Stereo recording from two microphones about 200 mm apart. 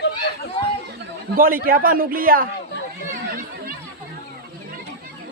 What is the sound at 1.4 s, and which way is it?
A man's voice, 45° right (ahead or behind).